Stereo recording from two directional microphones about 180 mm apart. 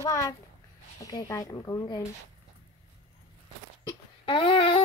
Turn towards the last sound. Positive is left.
turn(degrees=30)  # may be behind; listen again after turning